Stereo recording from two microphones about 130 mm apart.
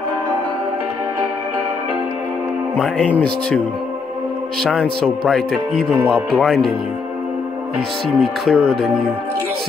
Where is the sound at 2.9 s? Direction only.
10° left (ahead or behind).